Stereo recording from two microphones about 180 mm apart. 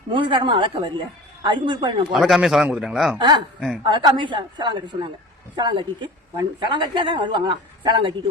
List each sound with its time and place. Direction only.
0.1 s a woman's voice: 25° right (ahead or behind)
2.1 s a man's voice: centre (ahead or behind)
3.2 s a woman's voice: 25° right (ahead or behind)